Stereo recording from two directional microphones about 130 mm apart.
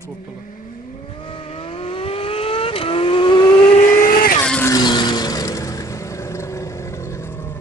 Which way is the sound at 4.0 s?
90° left.